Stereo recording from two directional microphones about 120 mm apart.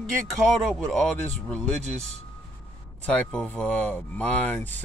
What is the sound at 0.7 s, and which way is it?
Speech, 5° left (ahead or behind).